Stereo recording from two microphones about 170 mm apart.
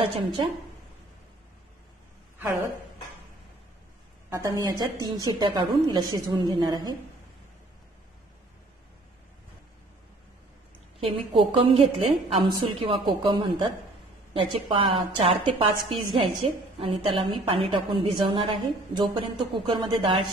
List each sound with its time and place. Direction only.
4.3 s a woman's voice: 20° right (ahead or behind)
11.0 s a woman's voice: 35° right (ahead or behind)